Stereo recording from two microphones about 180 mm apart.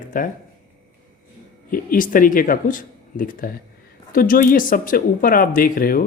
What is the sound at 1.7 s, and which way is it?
Speech, 50° left (ahead or behind).